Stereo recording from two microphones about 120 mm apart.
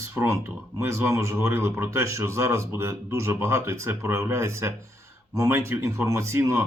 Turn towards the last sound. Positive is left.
turn(degrees=-25)  # may be behind; listen again after turning